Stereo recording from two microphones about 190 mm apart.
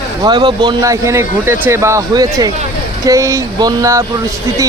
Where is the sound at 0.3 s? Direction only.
25° right (ahead or behind).